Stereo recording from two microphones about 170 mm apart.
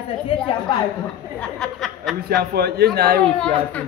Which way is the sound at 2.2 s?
70° right (ahead or behind).